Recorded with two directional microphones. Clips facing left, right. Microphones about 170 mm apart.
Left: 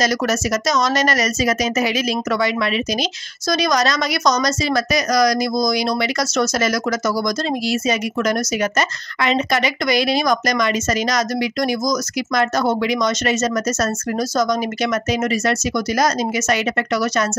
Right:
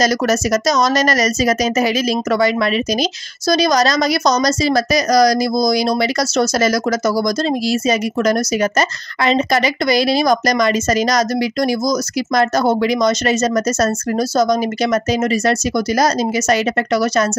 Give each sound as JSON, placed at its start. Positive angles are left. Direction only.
{"t": 0.0, "sound": "speech", "side_deg": -40}